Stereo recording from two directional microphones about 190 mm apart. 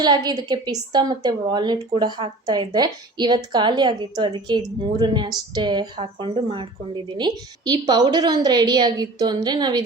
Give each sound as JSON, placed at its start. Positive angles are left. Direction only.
{"t": 0.0, "sound": "a woman's voice", "side_deg": -20}